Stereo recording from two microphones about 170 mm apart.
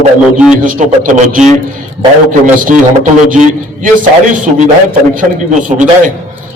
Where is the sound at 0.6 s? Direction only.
50° right (ahead or behind).